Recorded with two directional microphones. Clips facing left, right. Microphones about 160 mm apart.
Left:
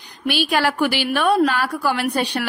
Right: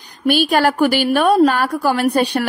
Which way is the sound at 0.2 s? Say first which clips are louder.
Right 5 dB; 45° right (ahead or behind).